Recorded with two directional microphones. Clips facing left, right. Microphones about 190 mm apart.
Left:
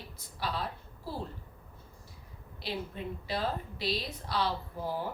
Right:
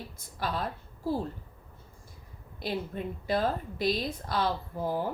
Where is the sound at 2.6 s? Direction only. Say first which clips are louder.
Right 4 dB; 50° right (ahead or behind).